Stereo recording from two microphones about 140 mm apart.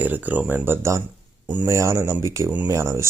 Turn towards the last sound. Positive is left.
turn(degrees=-20)  # may be behind; listen again after turning